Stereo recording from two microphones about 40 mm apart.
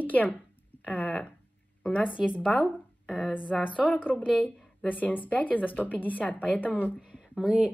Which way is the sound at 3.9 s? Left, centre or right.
Left.